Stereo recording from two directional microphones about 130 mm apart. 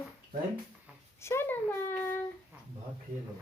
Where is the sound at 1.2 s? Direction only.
20° left (ahead or behind).